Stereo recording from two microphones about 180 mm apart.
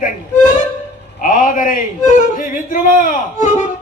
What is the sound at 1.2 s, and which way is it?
Speech, 50° left (ahead or behind).